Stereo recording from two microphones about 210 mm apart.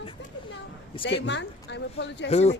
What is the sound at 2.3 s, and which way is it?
Speech, 30° left (ahead or behind).